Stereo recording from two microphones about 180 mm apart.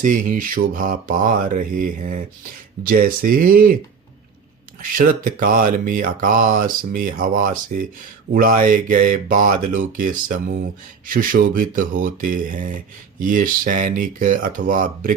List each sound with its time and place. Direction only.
0.0 s speech: 45° right (ahead or behind)
4.8 s speech: 50° right (ahead or behind)